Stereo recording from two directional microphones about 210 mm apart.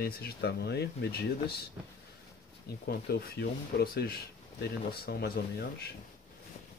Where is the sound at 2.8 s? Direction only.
50° left (ahead or behind).